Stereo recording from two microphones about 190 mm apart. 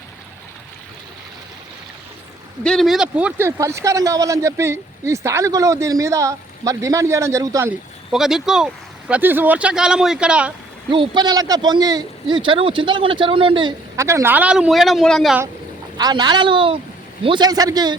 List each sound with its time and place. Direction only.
2.6 s speech: centre (ahead or behind); by 7.7 s 15° right (ahead or behind)
8.1 s speech: centre (ahead or behind)
10.9 s speech: 25° right (ahead or behind); by 15.4 s centre (ahead or behind)
16.0 s speech: 20° right (ahead or behind)